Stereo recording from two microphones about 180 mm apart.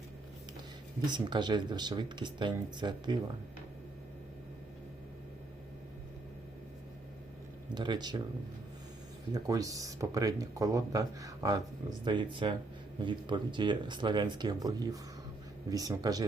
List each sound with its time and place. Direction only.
1.0 s speech: 25° right (ahead or behind)
7.7 s speech: 25° right (ahead or behind)
9.3 s speech: 20° right (ahead or behind)